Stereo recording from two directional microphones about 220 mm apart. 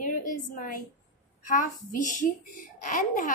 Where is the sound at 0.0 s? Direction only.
35° left (ahead or behind).